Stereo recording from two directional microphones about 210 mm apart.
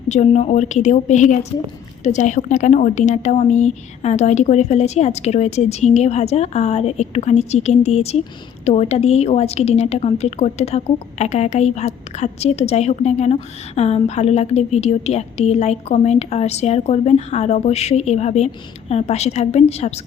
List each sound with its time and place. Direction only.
0.1 s a woman's voice: 30° left (ahead or behind)